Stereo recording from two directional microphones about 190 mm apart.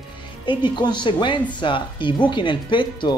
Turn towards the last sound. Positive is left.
turn(degrees=25)  # may be behind; listen again after turning